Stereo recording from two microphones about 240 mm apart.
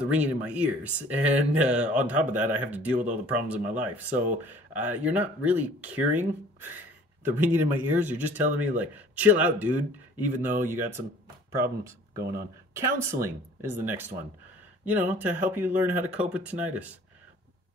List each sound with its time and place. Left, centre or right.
0.0 s speech: centre
12.2 s speech: right
12.7 s speech: centre